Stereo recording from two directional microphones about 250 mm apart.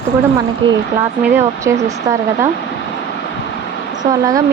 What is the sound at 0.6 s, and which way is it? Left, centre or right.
Speech, right.